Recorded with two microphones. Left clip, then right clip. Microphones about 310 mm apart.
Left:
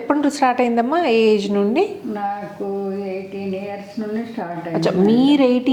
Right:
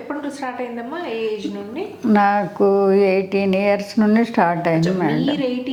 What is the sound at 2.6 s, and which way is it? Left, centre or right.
Speech, right.